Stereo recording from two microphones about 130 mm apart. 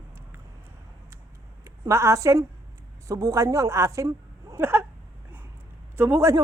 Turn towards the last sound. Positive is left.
turn(degrees=-20)  # may be behind; listen again after turning